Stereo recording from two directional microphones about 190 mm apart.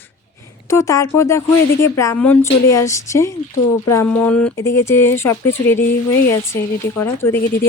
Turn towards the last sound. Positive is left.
turn(degrees=15)  # may be behind; listen again after turning